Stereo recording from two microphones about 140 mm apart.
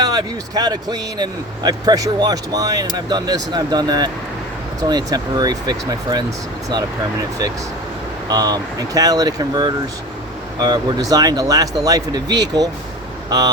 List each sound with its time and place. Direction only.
0.0 s speech: 30° right (ahead or behind)
8.3 s speech: 25° right (ahead or behind)